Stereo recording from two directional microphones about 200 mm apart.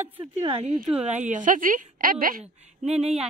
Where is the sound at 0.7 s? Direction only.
5° right (ahead or behind).